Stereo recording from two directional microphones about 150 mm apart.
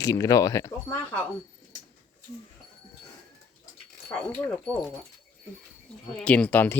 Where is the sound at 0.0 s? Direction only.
20° left (ahead or behind).